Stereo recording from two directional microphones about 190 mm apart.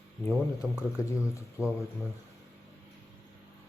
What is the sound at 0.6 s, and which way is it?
Speech, 5° right (ahead or behind).